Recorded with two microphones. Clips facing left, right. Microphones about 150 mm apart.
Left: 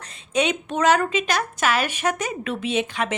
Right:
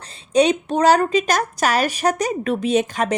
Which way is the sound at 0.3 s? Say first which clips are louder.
Right 6 dB; 35° right (ahead or behind).